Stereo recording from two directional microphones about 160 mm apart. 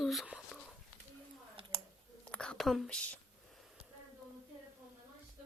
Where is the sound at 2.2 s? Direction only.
5° left (ahead or behind).